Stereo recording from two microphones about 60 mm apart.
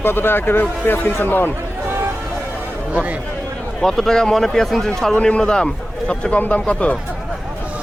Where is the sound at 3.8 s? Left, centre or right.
Centre.